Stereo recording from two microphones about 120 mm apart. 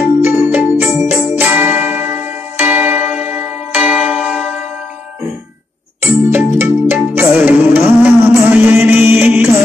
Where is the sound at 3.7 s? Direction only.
10° right (ahead or behind).